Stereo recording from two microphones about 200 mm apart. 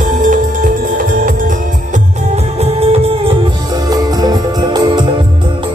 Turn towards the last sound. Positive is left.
turn(degrees=-20)  # may be behind; listen again after turning